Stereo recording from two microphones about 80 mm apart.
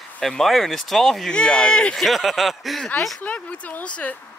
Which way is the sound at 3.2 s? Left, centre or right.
Centre.